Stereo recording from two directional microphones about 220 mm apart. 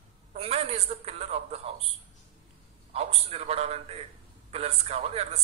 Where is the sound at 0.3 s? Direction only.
30° right (ahead or behind).